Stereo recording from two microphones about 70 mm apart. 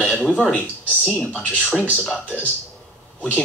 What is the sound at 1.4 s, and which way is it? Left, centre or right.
Speech, centre.